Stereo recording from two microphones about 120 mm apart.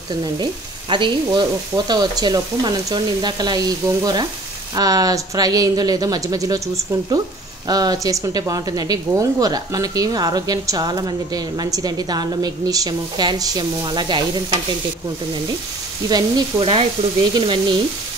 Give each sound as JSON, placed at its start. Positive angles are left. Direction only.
{"t": 0.2, "sound": "speech", "side_deg": -40}
{"t": 7.6, "sound": "speech", "side_deg": -35}
{"t": 16.1, "sound": "speech", "side_deg": -35}